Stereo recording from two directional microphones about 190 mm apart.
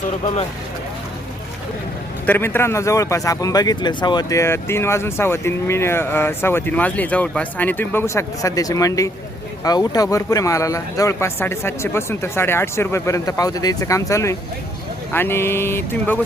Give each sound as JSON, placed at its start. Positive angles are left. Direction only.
{"t": 2.2, "sound": "a man's voice", "side_deg": 10}